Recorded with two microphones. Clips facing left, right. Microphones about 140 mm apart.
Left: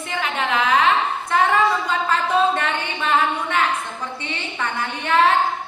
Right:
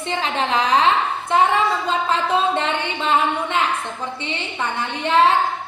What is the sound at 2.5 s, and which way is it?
A woman's voice, 20° right (ahead or behind).